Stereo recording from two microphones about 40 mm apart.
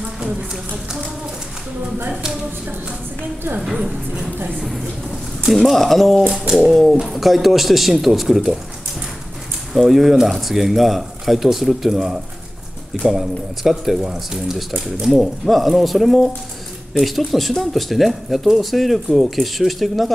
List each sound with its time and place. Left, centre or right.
0.0 s a sound: right
3.6 s speech: centre
9.8 s speech: centre